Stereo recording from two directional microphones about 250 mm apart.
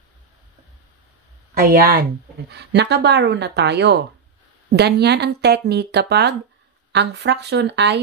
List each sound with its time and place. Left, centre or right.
1.5 s speech: right